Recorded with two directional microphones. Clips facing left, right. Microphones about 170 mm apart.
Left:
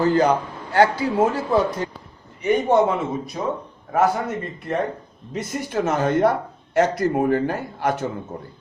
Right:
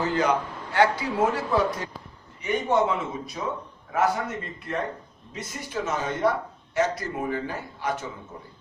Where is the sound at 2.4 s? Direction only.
50° left (ahead or behind).